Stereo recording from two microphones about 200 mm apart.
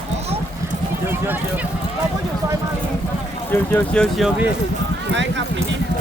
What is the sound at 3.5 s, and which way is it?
Speech, 5° left (ahead or behind).